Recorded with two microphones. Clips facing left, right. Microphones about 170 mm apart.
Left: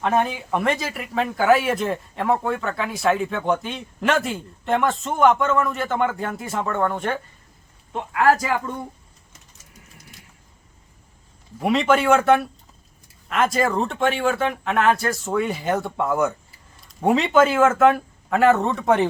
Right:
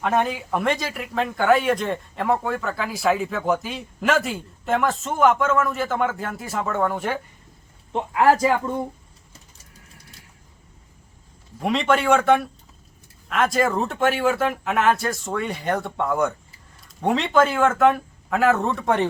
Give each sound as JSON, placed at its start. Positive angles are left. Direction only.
{"t": 0.0, "sound": "speech", "side_deg": 0}
{"t": 7.9, "sound": "speech", "side_deg": -25}
{"t": 11.6, "sound": "speech", "side_deg": 0}